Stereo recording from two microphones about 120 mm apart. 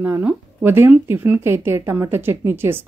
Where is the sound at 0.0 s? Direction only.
15° right (ahead or behind).